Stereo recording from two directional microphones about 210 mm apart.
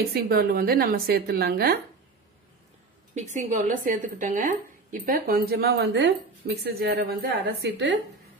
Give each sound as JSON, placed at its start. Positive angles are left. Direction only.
{"t": 0.1, "sound": "a woman's voice", "side_deg": -45}
{"t": 3.2, "sound": "a woman's voice", "side_deg": -35}